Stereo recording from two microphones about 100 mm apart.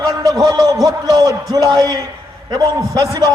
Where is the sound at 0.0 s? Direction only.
40° right (ahead or behind).